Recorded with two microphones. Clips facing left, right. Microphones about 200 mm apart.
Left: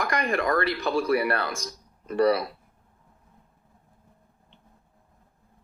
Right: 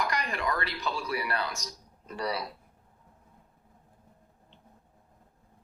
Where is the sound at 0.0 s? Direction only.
50° left (ahead or behind).